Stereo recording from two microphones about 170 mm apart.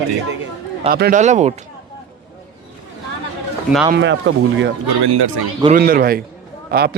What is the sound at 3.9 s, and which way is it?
Speech, 90° right.